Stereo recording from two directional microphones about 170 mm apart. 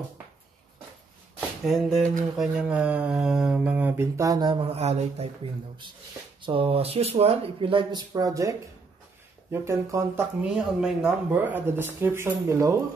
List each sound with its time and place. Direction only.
1.7 s a sound: centre (ahead or behind)
2.3 s speech: 5° right (ahead or behind); by 5.3 s 40° right (ahead or behind)
6.4 s speech: 35° right (ahead or behind); by 10.2 s 15° right (ahead or behind)
10.4 s speech: 5° right (ahead or behind)